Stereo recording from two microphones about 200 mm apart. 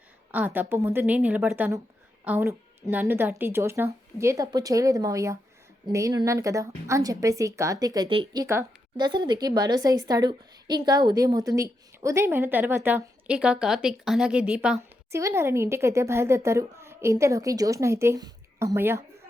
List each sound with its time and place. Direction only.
0.3 s a woman's voice: 10° right (ahead or behind)